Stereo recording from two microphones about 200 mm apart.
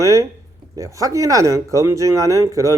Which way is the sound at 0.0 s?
15° right (ahead or behind).